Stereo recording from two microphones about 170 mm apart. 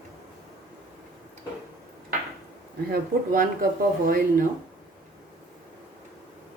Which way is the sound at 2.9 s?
55° right (ahead or behind).